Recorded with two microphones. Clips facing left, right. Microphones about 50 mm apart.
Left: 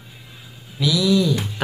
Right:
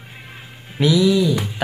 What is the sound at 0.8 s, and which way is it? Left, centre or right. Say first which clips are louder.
Speech: right 5 dB; right.